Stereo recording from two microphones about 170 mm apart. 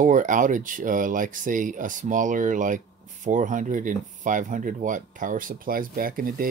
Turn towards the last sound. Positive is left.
turn(degrees=-55)  # may be behind; listen again after turning